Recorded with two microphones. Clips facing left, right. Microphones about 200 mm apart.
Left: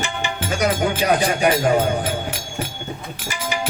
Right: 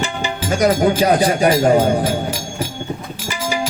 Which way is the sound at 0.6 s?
35° right (ahead or behind).